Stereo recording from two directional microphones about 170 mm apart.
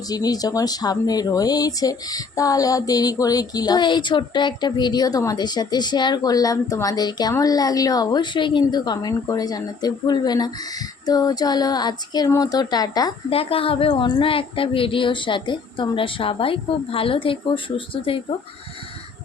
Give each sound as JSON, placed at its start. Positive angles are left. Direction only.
{"t": 0.1, "sound": "speech", "side_deg": 20}
{"t": 13.3, "sound": "a woman's voice", "side_deg": 35}